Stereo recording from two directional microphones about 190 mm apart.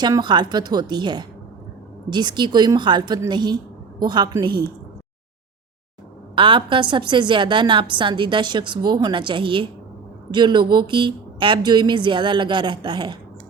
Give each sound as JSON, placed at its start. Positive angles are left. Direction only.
{"t": 0.0, "sound": "a woman's voice", "side_deg": -20}
{"t": 6.3, "sound": "a woman's voice", "side_deg": -25}